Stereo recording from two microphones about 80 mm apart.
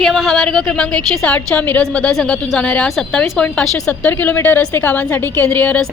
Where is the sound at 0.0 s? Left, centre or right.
Centre.